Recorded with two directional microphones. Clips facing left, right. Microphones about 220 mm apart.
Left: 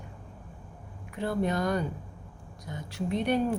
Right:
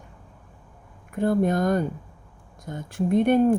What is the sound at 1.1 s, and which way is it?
Speech, 50° right (ahead or behind).